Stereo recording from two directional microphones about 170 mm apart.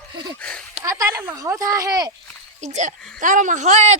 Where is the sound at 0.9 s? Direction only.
20° right (ahead or behind).